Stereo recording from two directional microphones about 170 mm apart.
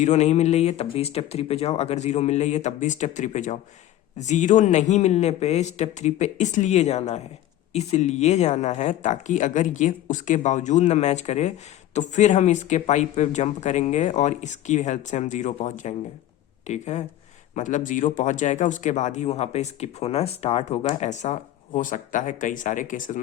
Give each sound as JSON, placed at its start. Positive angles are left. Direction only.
{"t": 0.0, "sound": "a man's voice", "side_deg": 40}